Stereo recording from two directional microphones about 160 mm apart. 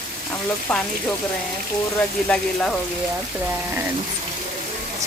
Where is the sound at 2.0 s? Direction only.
5° left (ahead or behind).